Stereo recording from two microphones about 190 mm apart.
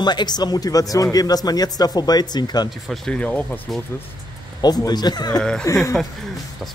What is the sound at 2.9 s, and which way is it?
Speech, 5° left (ahead or behind).